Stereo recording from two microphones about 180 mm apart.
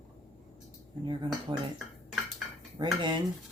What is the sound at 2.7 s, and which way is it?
Speech, 25° right (ahead or behind).